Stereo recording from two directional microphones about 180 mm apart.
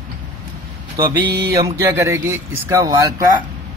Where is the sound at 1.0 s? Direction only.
60° right (ahead or behind).